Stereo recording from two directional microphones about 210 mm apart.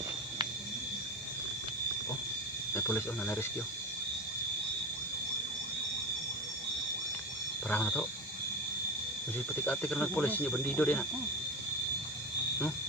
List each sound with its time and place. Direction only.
2.7 s speech: 10° left (ahead or behind)
7.7 s speech: 5° left (ahead or behind)
9.6 s speech: 5° left (ahead or behind)